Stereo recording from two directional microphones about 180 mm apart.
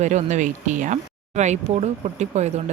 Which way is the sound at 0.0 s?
40° right (ahead or behind).